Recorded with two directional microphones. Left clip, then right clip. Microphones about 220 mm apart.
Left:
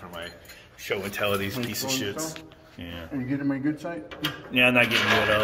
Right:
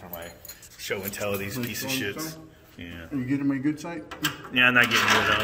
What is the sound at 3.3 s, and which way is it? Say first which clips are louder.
Speech: right 1 dB; 30° right (ahead or behind).